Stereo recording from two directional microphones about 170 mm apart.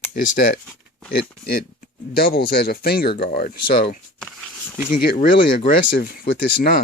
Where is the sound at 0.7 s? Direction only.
5° left (ahead or behind).